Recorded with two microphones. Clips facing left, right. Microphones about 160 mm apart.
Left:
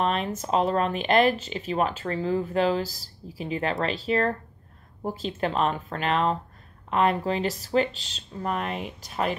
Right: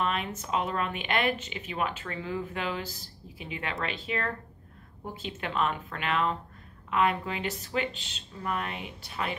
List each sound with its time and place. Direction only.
0.0 s speech: 35° left (ahead or behind)